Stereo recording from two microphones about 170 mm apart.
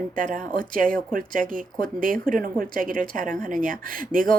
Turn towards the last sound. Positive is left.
turn(degrees=-55)  # may be behind; listen again after turning